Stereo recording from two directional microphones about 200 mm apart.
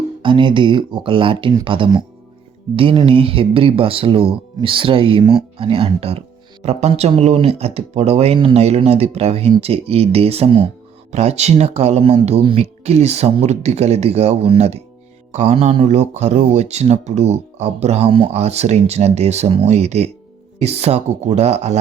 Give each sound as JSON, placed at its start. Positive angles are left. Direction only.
{"t": 0.2, "sound": "speech", "side_deg": -25}